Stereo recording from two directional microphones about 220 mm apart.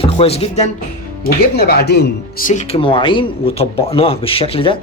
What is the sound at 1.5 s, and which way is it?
Speech, 45° left (ahead or behind).